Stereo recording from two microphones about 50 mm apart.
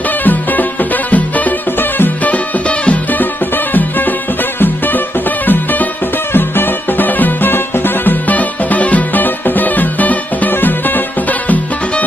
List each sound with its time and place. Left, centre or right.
0.2 s music: left
4.6 s music: left